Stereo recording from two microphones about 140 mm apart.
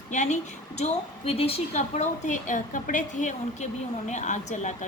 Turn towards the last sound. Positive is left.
turn(degrees=60)  # may be behind; listen again after turning